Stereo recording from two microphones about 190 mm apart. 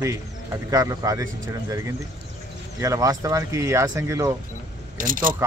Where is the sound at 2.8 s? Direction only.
15° right (ahead or behind).